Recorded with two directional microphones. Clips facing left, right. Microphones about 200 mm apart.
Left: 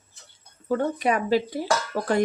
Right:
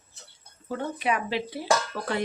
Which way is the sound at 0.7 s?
40° left (ahead or behind).